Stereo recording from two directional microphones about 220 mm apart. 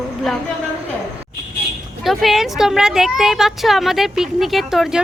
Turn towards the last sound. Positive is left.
turn(degrees=0)  # may be behind; listen again after turning